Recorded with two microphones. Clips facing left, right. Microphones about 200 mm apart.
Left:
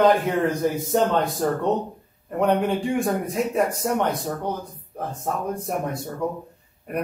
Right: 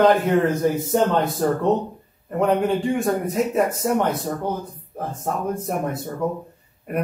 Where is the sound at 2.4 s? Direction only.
Centre (ahead or behind).